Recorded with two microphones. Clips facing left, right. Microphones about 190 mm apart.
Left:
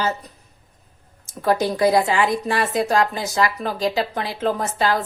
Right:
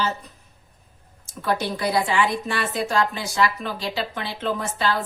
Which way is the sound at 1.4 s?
40° left (ahead or behind).